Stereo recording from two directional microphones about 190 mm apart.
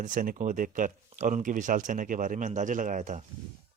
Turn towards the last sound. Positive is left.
turn(degrees=-40)  # may be behind; listen again after turning